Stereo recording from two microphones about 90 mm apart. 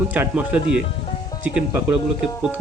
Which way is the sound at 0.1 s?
15° right (ahead or behind).